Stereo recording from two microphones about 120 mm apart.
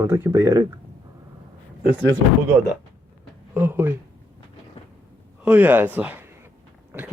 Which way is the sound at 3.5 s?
20° right (ahead or behind).